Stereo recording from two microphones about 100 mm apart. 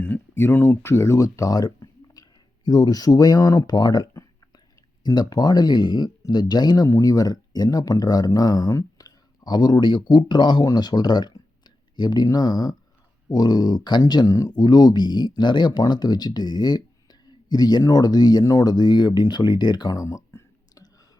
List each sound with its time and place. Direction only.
0.0 s speech: 20° left (ahead or behind)